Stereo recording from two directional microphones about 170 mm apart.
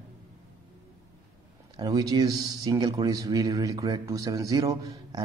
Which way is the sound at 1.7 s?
20° right (ahead or behind).